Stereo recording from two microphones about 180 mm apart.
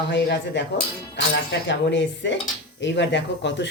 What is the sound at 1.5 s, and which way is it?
Dishes, 80° left.